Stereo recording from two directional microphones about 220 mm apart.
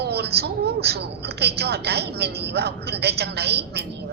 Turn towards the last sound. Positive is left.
turn(degrees=-50)  # may be behind; listen again after turning